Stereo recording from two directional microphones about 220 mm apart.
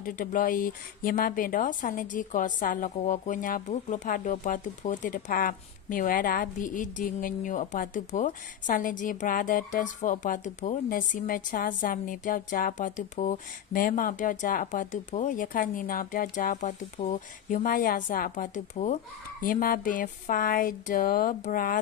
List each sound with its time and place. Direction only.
0.0 s speech: 40° left (ahead or behind)